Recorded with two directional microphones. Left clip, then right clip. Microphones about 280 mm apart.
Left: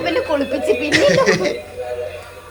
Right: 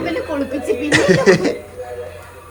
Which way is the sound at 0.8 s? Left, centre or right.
Centre.